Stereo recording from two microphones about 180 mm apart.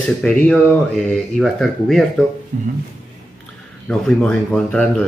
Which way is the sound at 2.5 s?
40° right (ahead or behind).